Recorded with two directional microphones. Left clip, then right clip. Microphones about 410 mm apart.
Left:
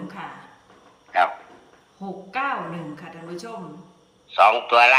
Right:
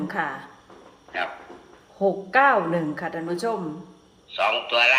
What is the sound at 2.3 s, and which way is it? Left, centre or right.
A woman's voice, centre.